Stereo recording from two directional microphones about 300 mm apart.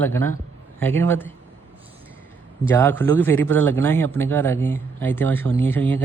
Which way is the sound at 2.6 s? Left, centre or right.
Centre.